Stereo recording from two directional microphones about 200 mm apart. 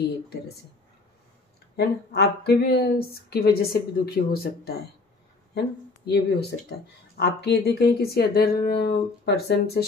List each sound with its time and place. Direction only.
1.8 s a woman's voice: 55° left (ahead or behind)